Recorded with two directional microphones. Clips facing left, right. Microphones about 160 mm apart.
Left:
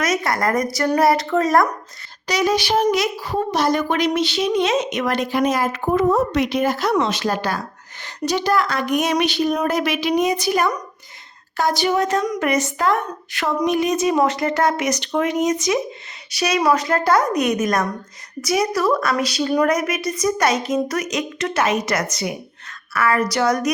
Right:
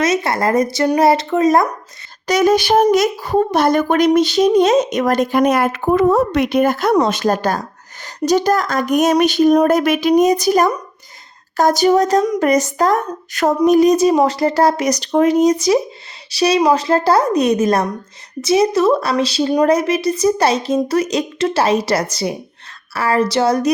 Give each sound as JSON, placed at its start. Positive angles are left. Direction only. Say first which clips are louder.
{"t": 0.0, "sound": "speech", "louder": "right 4 dB", "side_deg": -25}
{"t": 2.2, "sound": "a woman's voice", "louder": "right 6 dB", "side_deg": -50}
{"t": 12.2, "sound": "speech", "louder": "right 6 dB", "side_deg": -25}
{"t": 12.5, "sound": "speech", "louder": "right 5 dB", "side_deg": -40}